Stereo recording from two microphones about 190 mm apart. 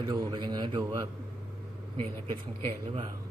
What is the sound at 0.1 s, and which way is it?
Speech, 25° right (ahead or behind).